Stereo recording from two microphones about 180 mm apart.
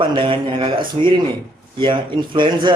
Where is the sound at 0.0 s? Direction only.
25° right (ahead or behind).